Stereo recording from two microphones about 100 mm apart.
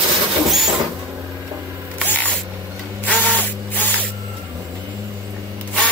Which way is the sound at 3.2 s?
15° left (ahead or behind).